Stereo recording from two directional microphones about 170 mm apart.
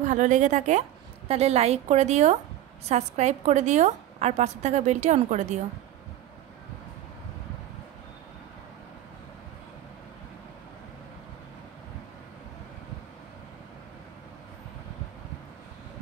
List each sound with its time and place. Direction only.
0.0 s a woman's voice: 45° right (ahead or behind)